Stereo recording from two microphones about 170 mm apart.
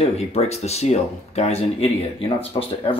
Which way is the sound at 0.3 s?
35° left (ahead or behind).